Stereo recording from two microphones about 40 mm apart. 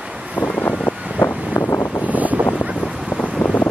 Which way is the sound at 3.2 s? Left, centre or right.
Left.